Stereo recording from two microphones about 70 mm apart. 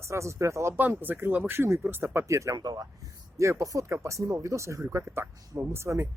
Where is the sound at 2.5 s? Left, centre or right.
Right.